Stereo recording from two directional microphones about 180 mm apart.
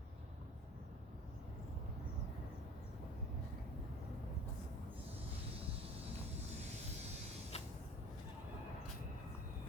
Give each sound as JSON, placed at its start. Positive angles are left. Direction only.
{"t": 7.5, "sound": "vehicle", "side_deg": 35}